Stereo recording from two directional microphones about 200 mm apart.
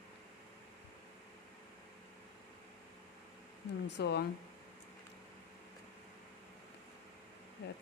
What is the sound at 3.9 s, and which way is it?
Speech, 60° left (ahead or behind).